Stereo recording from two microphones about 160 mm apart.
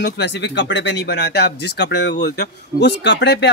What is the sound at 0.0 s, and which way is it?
Speech, 90° left.